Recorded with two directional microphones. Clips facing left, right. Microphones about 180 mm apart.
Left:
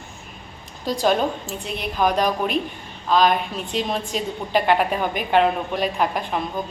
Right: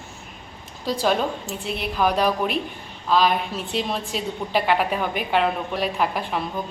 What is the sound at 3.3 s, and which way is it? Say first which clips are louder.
A woman's voice: left 1 dB; centre (ahead or behind).